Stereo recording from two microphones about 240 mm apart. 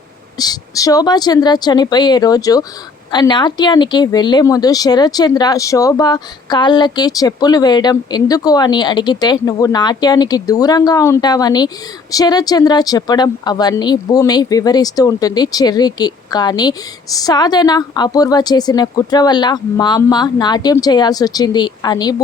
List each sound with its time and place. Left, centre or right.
0.3 s speech: centre